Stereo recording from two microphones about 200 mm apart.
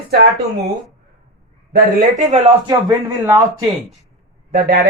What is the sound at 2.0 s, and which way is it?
Speech, 35° right (ahead or behind).